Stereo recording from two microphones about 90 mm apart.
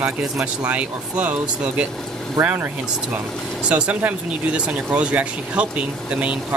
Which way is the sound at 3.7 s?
15° right (ahead or behind).